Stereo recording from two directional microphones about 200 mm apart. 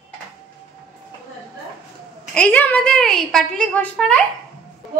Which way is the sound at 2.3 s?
5° left (ahead or behind).